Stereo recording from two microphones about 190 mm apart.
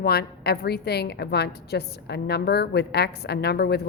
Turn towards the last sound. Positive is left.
turn(degrees=60)  # may be behind; listen again after turning